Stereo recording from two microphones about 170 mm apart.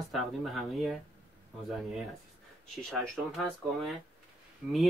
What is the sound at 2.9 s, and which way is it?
Speech, centre (ahead or behind).